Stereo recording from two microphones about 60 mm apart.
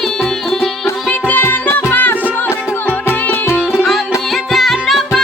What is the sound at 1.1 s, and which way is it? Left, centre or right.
Music, left.